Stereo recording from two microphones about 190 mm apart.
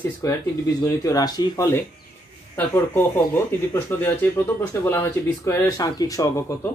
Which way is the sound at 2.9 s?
10° left (ahead or behind).